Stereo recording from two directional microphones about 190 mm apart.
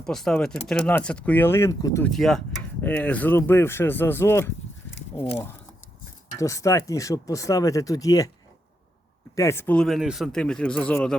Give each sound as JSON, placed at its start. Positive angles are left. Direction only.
{"t": 0.0, "sound": "speech", "side_deg": 0}
{"t": 2.0, "sound": "speech", "side_deg": 0}
{"t": 6.4, "sound": "speech", "side_deg": 15}
{"t": 9.3, "sound": "speech", "side_deg": 15}